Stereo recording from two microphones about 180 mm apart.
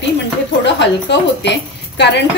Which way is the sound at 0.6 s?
75° left (ahead or behind).